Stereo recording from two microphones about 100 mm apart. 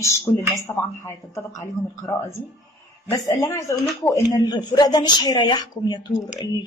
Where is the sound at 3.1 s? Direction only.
35° left (ahead or behind).